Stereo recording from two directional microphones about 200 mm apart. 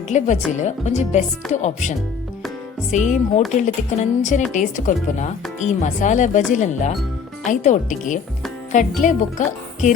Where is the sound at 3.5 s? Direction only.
35° left (ahead or behind).